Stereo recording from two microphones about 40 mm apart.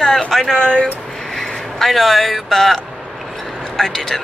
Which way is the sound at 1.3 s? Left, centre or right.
Centre.